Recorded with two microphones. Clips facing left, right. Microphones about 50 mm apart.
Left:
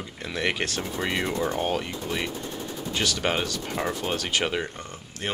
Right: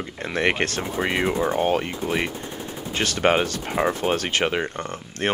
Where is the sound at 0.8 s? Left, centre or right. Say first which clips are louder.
Right 4 dB; right.